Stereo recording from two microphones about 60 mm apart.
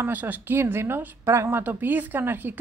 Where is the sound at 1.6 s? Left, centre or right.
Right.